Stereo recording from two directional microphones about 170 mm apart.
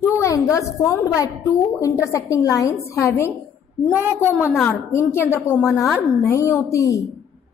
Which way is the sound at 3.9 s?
15° right (ahead or behind).